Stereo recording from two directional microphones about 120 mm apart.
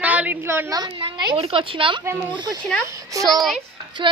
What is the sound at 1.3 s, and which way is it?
A woman's voice, 50° right (ahead or behind).